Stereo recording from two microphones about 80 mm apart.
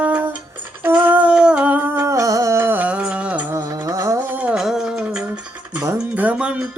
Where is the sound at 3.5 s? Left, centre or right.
Right.